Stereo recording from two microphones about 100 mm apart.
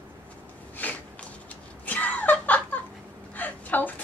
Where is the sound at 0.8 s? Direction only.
15° left (ahead or behind).